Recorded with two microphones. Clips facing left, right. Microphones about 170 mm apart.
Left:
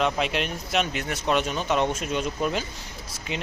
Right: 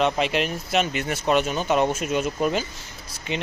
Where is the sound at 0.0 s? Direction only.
Centre (ahead or behind).